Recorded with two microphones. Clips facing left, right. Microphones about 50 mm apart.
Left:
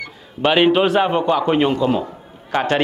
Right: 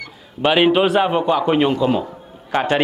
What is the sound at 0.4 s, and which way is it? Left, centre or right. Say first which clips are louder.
A man's voice: even; centre.